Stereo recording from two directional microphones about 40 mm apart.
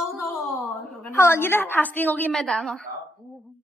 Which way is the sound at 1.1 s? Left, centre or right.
Left.